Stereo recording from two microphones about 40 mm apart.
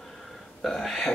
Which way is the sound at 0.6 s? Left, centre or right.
Centre.